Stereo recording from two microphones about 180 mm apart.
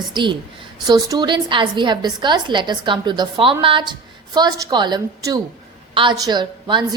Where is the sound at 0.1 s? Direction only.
25° right (ahead or behind).